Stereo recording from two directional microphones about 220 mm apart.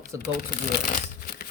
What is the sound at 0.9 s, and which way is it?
Shuffling cards, 40° left (ahead or behind).